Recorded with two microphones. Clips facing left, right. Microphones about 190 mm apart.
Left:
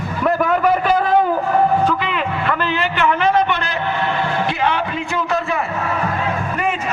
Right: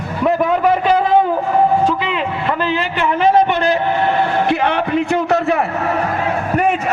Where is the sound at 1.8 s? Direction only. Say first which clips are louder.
Right 2 dB; 30° right (ahead or behind).